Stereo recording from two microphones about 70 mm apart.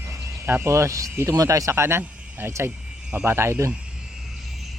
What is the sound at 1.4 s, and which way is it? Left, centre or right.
Speech, right.